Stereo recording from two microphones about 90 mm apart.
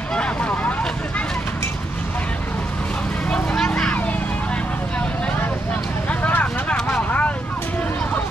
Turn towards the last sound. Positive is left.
turn(degrees=15)  # may be behind; listen again after turning